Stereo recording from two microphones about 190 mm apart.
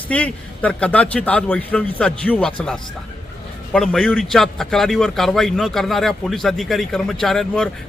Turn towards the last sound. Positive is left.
turn(degrees=0)  # may be behind; listen again after turning